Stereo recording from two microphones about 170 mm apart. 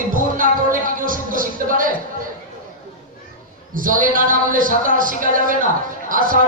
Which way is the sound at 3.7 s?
50° right (ahead or behind).